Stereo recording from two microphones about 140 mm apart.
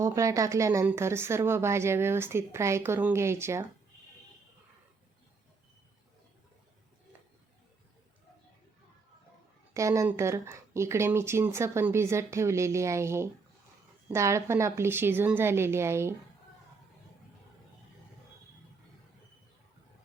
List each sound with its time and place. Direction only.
0.0 s a woman's voice: 20° right (ahead or behind)
9.7 s a woman's voice: 20° right (ahead or behind)